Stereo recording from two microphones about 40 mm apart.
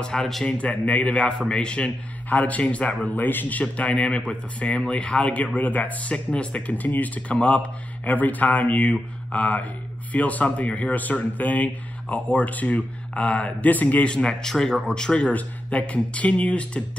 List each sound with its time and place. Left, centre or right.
0.0 s speech: centre
0.5 s speech: left
2.2 s speech: left
3.2 s speech: left
3.6 s speech: left
6.1 s speech: left
7.3 s speech: left
14.1 s speech: left
15.2 s speech: left